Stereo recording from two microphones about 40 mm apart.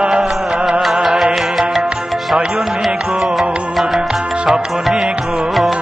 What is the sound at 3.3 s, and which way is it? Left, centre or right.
Music, centre.